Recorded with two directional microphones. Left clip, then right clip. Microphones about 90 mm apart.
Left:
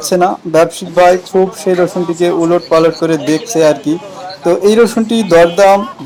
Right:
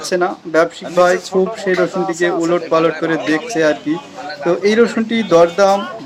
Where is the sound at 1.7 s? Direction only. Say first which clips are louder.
Left 4 dB; 30° left (ahead or behind).